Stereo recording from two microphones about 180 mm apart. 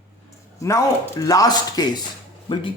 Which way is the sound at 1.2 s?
20° left (ahead or behind).